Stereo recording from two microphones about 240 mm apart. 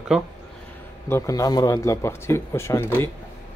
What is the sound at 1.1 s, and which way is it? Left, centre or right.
Speech, centre.